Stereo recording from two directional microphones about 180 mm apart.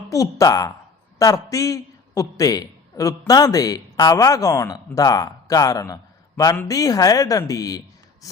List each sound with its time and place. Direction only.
0.1 s a man's voice: 20° left (ahead or behind)